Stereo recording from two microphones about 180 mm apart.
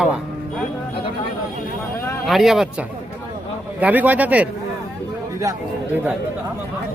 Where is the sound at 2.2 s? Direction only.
Centre (ahead or behind); by 6.0 s 15° right (ahead or behind).